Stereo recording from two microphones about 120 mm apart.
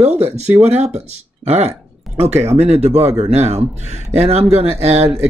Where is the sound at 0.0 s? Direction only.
65° right (ahead or behind).